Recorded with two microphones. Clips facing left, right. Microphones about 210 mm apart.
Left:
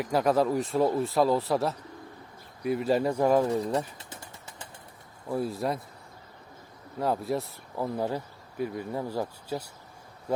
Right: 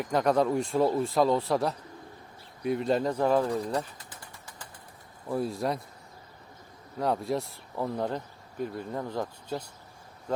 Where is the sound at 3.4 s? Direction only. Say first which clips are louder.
Left 2 dB; 25° left (ahead or behind).